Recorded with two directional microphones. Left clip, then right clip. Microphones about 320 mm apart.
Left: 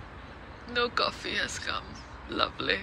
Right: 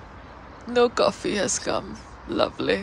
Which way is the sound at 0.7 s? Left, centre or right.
Centre.